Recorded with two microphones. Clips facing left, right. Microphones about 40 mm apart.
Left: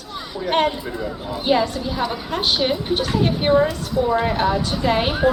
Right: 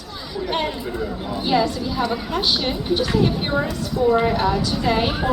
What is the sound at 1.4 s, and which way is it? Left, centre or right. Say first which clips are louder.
Speech: left 1 dB; left.